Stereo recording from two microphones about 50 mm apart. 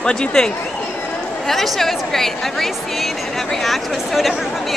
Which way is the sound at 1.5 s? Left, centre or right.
Centre.